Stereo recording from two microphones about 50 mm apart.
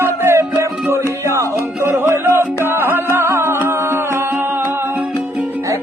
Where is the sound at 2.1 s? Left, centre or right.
Right.